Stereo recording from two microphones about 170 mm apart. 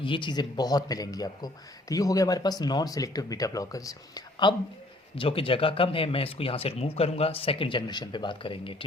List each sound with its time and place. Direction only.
0.0 s speech: 30° left (ahead or behind)